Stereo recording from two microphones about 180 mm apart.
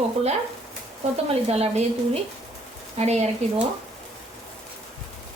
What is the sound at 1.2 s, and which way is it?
A woman's voice, 35° right (ahead or behind).